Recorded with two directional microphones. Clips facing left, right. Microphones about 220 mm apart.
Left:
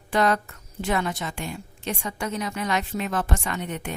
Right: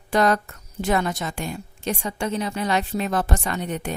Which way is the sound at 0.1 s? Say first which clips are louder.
Right 2 dB; 40° right (ahead or behind).